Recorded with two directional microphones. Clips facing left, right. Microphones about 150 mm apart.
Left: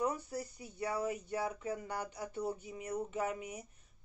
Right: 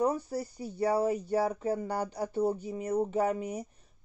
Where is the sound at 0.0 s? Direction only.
30° right (ahead or behind).